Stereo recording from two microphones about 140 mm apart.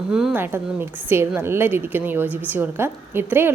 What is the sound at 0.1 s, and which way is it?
Speech, 5° right (ahead or behind).